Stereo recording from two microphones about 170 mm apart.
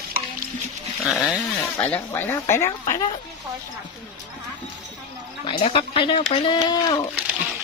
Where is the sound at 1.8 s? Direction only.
10° left (ahead or behind).